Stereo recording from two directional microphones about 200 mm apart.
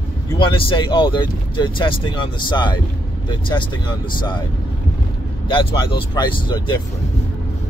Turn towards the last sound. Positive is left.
turn(degrees=25)  # may be behind; listen again after turning